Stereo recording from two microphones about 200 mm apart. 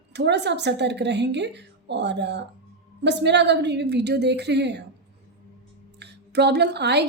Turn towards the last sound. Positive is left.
turn(degrees=-55)  # may be behind; listen again after turning